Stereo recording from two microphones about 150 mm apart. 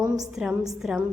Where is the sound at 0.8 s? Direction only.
5° right (ahead or behind).